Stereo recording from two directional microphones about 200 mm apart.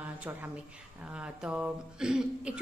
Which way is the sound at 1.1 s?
5° right (ahead or behind).